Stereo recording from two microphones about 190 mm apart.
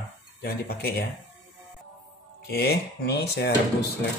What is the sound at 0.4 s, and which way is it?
Speech, 55° left (ahead or behind).